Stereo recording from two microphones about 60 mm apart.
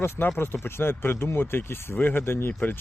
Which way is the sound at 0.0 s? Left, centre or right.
Left.